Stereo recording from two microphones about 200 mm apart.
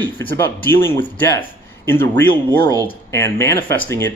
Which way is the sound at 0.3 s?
10° left (ahead or behind).